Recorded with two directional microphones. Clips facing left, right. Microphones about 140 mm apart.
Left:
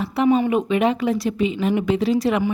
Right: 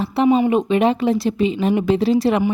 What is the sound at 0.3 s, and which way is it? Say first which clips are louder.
Speech: right 2 dB; 20° right (ahead or behind).